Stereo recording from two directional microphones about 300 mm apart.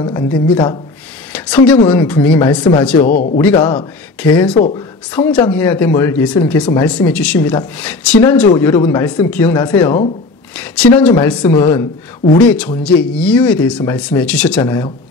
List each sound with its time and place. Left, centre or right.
0.0 s speech: centre
1.3 s a sound: centre
1.9 s speech: centre
3.0 s speech: left
4.2 s speech: centre